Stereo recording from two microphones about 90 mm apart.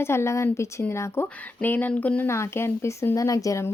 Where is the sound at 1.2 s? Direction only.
20° left (ahead or behind).